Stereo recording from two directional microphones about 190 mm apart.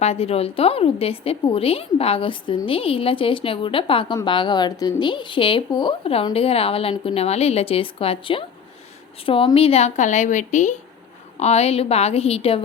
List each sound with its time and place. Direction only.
0.0 s a woman's voice: 30° left (ahead or behind)